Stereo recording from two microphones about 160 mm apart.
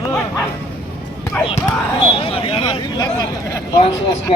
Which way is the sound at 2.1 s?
35° left (ahead or behind).